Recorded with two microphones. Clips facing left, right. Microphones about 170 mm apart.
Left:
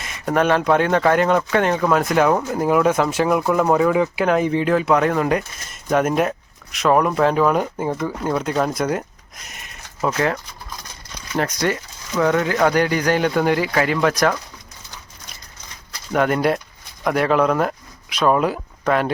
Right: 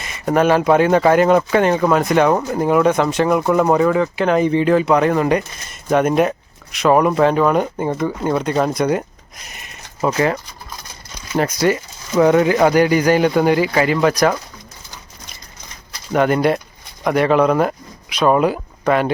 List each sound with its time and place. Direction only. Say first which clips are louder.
0.0 s speech: right 3 dB; centre (ahead or behind)
12.1 s speech: right 6 dB; 20° right (ahead or behind)
16.1 s speech: right 3 dB; centre (ahead or behind)